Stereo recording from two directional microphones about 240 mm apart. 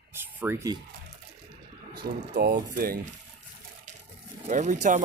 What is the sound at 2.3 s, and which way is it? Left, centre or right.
Speech, right.